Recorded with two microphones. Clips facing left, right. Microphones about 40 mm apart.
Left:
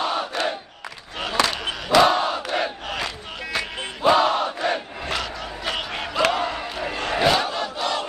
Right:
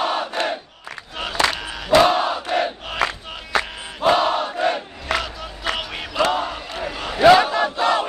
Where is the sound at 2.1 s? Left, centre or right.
Right.